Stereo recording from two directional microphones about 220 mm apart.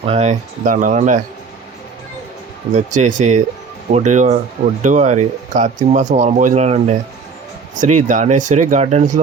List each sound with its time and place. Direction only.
0.0 s speech: 30° right (ahead or behind)
2.7 s speech: 35° right (ahead or behind)